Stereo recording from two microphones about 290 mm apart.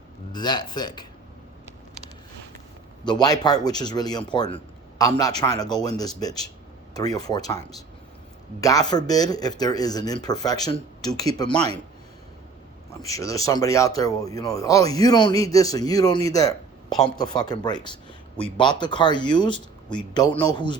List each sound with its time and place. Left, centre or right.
0.3 s speech: centre
3.1 s a man's voice: centre
8.6 s speech: centre
13.0 s speech: centre